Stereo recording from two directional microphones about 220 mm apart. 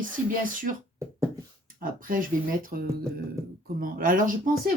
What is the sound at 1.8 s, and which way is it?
Speech, 40° right (ahead or behind).